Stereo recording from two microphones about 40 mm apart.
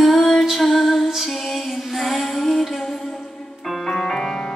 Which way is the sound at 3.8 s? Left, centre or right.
Centre.